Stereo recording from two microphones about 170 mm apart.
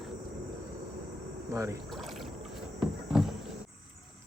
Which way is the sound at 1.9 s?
Centre (ahead or behind).